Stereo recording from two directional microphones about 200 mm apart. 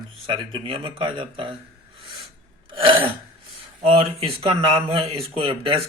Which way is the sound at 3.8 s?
30° right (ahead or behind).